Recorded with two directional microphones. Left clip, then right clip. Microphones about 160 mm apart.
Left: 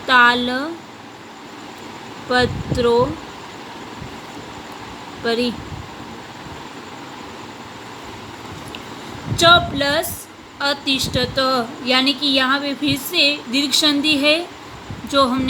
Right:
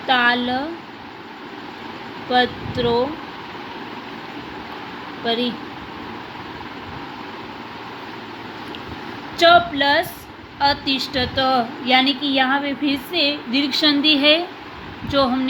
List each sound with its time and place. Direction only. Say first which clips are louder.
0.1 s speech: left 4 dB; 30° left (ahead or behind)
2.3 s speech: even; 35° left (ahead or behind)
5.2 s speech: left 2 dB; 35° left (ahead or behind)
9.4 s speech: even; 10° left (ahead or behind)
15.1 s speech: left 2 dB; 20° left (ahead or behind)